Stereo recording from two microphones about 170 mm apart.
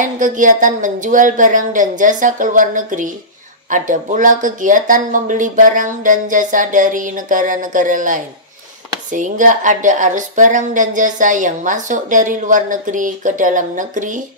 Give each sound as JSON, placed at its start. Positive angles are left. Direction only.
{"t": 0.0, "sound": "a woman's voice", "side_deg": -50}